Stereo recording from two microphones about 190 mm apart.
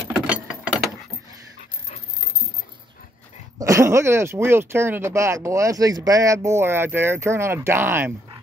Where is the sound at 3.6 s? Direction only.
15° right (ahead or behind).